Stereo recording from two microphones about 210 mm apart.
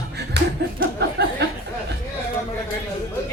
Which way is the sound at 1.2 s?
50° right (ahead or behind).